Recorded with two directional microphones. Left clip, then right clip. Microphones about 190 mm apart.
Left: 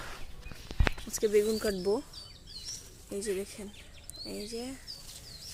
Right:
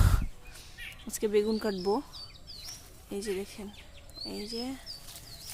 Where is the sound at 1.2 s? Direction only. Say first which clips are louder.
Even; 10° right (ahead or behind).